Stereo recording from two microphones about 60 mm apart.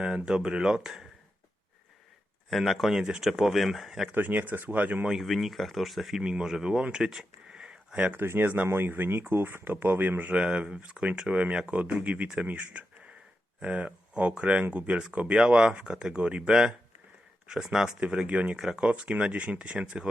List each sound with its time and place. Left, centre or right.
0.3 s speech: centre
2.5 s speech: centre
4.1 s speech: right
5.0 s speech: centre
6.2 s speech: centre
6.9 s a sound: centre
8.1 s speech: right
10.3 s speech: right; by 17.9 s centre
18.0 s speech: centre
18.5 s speech: centre
18.8 s speech: centre